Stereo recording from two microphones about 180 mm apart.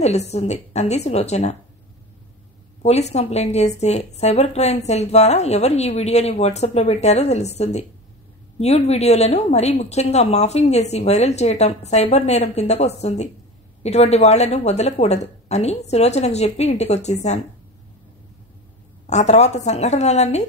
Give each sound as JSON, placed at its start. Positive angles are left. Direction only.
{"t": 0.0, "sound": "a woman's voice", "side_deg": 35}
{"t": 2.8, "sound": "a woman's voice", "side_deg": 35}
{"t": 19.0, "sound": "a woman's voice", "side_deg": 40}